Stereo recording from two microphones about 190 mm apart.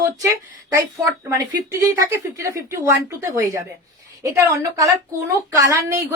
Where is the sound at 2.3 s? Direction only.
15° right (ahead or behind).